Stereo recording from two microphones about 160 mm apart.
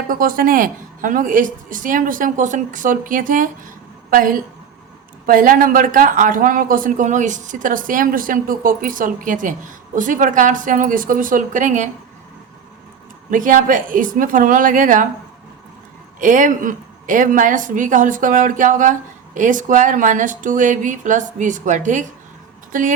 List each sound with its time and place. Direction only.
0.1 s speech: 60° right (ahead or behind)
13.3 s speech: 55° right (ahead or behind)
16.2 s a woman's voice: 55° right (ahead or behind)